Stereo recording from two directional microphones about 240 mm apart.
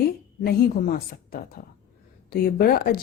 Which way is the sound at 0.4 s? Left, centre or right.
Left.